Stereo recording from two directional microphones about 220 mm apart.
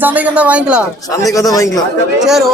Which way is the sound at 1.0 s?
15° left (ahead or behind).